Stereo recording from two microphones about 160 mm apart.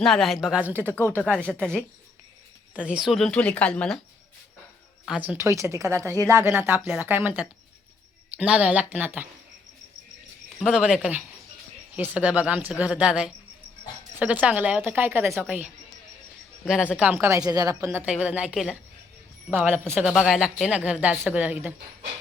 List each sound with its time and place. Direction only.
0.0 s speech: centre (ahead or behind)
0.9 s speech: 15° left (ahead or behind)
2.7 s speech: 5° right (ahead or behind)
5.0 s a woman's voice: 5° right (ahead or behind)
10.6 s a woman's voice: centre (ahead or behind)